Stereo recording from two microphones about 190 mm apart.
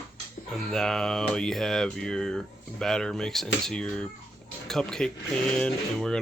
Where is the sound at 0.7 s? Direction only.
5° left (ahead or behind).